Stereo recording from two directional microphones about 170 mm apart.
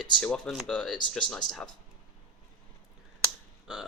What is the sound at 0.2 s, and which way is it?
Speech, 5° left (ahead or behind).